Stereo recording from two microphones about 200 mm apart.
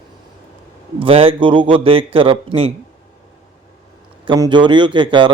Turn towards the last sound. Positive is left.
turn(degrees=-25)  # may be behind; listen again after turning